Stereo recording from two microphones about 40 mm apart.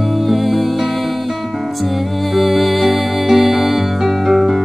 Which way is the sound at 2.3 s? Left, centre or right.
Centre.